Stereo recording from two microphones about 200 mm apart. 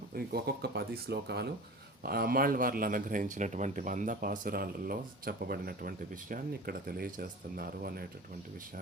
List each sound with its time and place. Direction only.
0.1 s speech: 50° right (ahead or behind)